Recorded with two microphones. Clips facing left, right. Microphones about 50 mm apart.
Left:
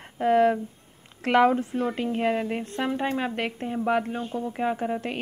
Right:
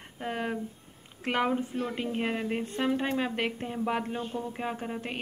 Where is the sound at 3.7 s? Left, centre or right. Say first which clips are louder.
Left 5 dB; centre.